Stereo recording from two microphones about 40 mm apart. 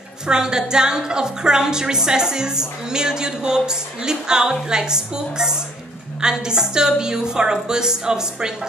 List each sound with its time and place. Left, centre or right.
0.3 s a woman's voice: centre